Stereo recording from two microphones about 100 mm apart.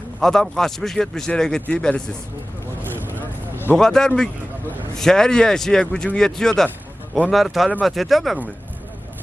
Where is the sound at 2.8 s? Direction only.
20° right (ahead or behind).